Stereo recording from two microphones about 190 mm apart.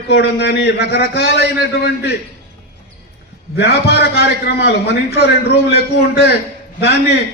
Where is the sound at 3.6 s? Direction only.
55° left (ahead or behind).